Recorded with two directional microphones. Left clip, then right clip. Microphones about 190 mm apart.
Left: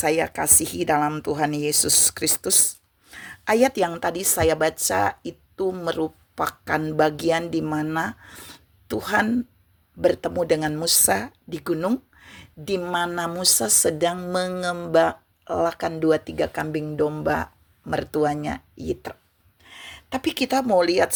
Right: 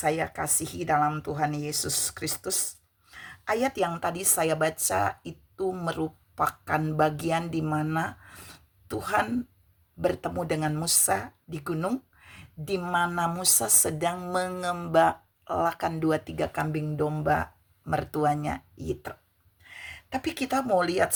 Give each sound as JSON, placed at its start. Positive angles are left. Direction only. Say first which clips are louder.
{"t": 0.0, "sound": "speech", "louder": "left 5 dB", "side_deg": 45}